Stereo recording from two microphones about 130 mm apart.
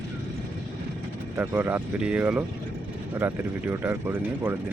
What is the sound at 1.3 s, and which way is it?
Speech, 15° right (ahead or behind).